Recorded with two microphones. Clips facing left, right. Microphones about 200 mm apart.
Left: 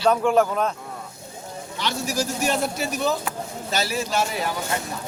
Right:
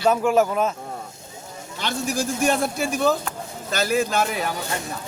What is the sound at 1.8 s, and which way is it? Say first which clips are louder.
A man's voice: right 1 dB; 50° right (ahead or behind).